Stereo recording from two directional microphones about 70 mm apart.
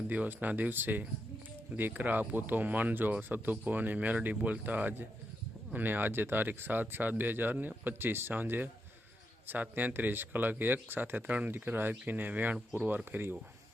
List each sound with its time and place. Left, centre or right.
0.1 s speech: right